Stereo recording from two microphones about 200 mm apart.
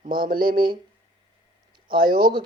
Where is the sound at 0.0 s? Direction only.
45° right (ahead or behind).